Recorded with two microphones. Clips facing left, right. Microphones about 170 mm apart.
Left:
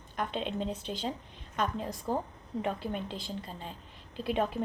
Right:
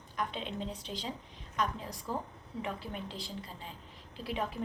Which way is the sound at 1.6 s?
25° left (ahead or behind).